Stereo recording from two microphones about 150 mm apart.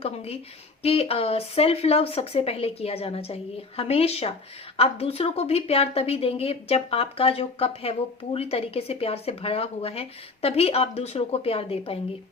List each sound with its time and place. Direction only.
0.0 s a woman's voice: 40° left (ahead or behind)